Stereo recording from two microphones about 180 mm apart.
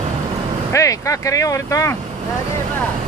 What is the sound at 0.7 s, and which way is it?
Speech, 15° left (ahead or behind).